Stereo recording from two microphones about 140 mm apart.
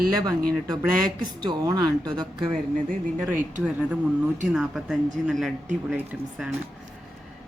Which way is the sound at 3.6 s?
10° right (ahead or behind).